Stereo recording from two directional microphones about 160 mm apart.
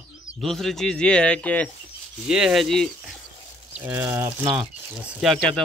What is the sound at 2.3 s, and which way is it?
Speech, 5° right (ahead or behind).